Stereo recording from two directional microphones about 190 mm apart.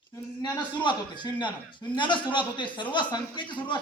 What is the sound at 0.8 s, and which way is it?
A man's voice, 25° left (ahead or behind).